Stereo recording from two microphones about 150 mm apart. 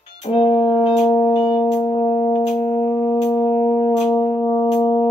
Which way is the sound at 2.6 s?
25° left (ahead or behind).